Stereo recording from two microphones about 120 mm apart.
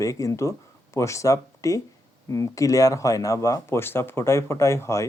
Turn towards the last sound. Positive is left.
turn(degrees=25)  # may be behind; listen again after turning